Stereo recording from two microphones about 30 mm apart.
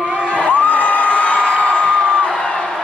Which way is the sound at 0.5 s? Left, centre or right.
Left.